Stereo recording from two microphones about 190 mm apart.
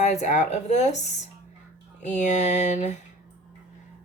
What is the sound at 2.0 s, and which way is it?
Speech, 40° left (ahead or behind).